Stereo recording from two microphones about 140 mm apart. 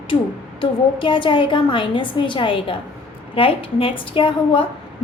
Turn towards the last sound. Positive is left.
turn(degrees=40)  # may be behind; listen again after turning